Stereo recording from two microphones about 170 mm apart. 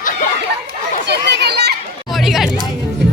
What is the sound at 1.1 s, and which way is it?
Children playing, 80° right.